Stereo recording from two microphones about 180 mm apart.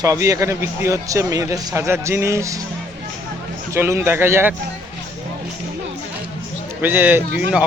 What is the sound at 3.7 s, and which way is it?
Speech, 15° right (ahead or behind).